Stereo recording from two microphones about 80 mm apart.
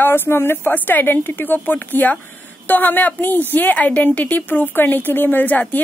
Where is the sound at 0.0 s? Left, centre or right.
Left.